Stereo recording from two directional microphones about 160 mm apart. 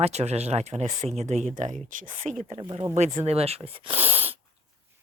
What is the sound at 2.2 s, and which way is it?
Speech, centre (ahead or behind).